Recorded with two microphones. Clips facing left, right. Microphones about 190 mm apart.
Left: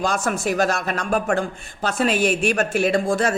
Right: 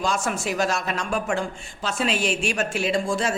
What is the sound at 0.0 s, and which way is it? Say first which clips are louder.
A man's voice: left 3 dB; 60° left (ahead or behind).